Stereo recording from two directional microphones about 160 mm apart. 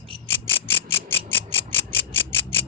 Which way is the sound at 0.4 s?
15° left (ahead or behind).